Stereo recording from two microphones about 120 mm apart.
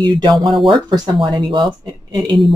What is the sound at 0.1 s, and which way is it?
Speech, 40° right (ahead or behind).